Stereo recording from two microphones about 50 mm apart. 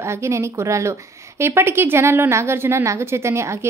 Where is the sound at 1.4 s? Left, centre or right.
Right.